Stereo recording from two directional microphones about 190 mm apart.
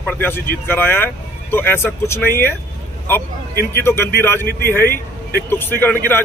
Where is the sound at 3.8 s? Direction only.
10° left (ahead or behind).